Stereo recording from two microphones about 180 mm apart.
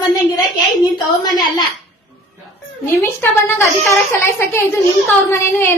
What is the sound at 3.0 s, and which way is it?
A woman's voice, 15° left (ahead or behind).